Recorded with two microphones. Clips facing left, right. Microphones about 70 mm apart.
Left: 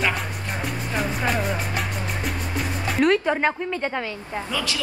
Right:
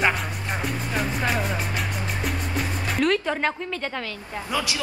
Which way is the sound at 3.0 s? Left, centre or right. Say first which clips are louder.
Left 3 dB; centre.